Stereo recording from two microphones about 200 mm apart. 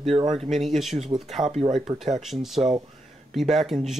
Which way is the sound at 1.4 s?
20° right (ahead or behind).